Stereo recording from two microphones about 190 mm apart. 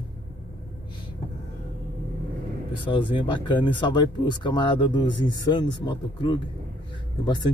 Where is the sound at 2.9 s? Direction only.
25° left (ahead or behind).